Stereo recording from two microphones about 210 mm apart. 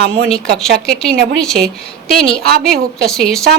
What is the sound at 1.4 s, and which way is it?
Speech, centre (ahead or behind).